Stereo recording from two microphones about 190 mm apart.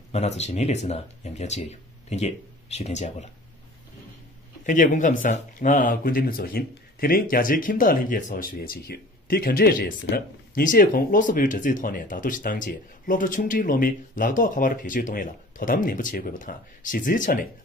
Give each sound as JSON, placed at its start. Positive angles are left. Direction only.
{"t": 0.1, "sound": "speech", "side_deg": 35}
{"t": 4.6, "sound": "speech", "side_deg": 45}